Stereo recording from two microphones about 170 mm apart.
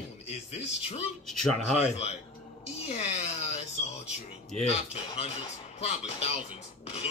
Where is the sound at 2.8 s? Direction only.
40° left (ahead or behind).